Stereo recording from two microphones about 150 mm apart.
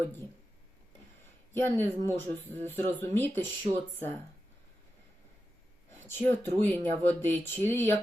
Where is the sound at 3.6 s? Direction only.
45° right (ahead or behind).